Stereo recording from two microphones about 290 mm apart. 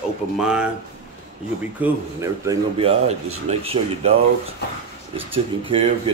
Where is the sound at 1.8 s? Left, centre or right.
Centre.